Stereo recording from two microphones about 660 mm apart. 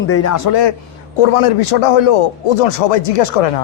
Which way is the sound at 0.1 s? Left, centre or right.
Left.